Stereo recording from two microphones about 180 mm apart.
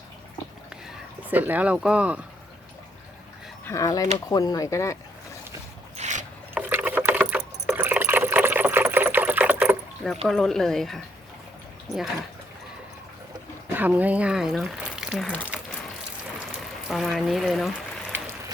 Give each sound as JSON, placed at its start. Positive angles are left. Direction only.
{"t": 1.3, "sound": "speech", "side_deg": -10}
{"t": 3.7, "sound": "speech", "side_deg": 20}
{"t": 6.0, "sound": "wood", "side_deg": -40}
{"t": 6.5, "sound": "a sound", "side_deg": -10}
{"t": 10.2, "sound": "a woman's voice", "side_deg": 0}
{"t": 13.7, "sound": "speech", "side_deg": -10}
{"t": 16.5, "sound": "speech", "side_deg": 0}
{"t": 18.1, "sound": "boat", "side_deg": -15}